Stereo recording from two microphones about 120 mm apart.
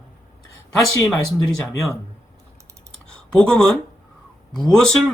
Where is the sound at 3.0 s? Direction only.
5° left (ahead or behind).